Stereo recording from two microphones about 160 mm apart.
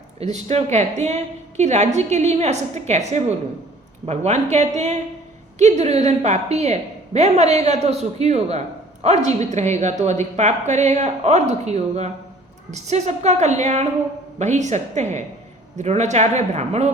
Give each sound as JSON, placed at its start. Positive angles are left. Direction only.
{"t": 0.2, "sound": "a woman's voice", "side_deg": -45}